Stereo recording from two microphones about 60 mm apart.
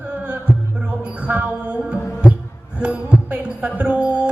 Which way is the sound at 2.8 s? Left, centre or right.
Right.